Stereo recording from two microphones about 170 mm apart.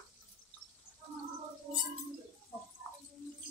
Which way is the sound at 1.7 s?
35° right (ahead or behind).